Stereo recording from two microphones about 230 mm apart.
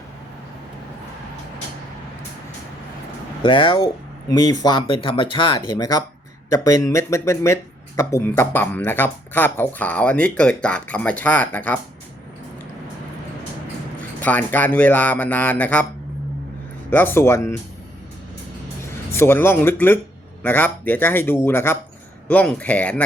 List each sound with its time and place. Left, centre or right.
3.4 s speech: left
14.2 s speech: centre
16.9 s speech: centre
19.1 s speech: centre